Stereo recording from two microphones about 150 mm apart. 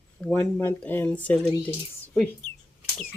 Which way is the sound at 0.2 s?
5° left (ahead or behind).